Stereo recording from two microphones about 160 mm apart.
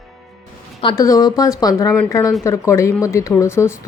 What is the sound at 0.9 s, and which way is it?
Speech, 20° left (ahead or behind).